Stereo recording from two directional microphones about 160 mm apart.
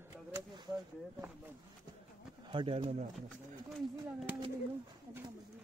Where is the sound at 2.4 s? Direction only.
30° right (ahead or behind).